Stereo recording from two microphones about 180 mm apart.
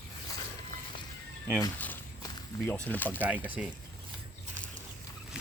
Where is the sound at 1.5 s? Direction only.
10° left (ahead or behind).